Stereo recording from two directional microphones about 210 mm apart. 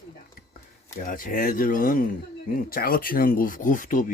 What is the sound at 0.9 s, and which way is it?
Speech, 40° left (ahead or behind).